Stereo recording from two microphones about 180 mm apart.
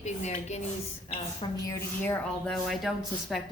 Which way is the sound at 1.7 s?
10° left (ahead or behind).